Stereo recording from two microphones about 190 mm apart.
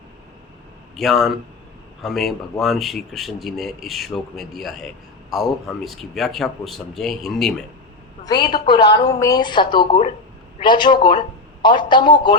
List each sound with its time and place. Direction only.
0.9 s speech: centre (ahead or behind)
8.4 s a man's voice: 25° left (ahead or behind)